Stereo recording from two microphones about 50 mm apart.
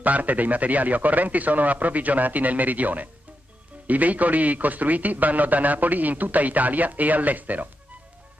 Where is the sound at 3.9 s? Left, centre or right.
Right.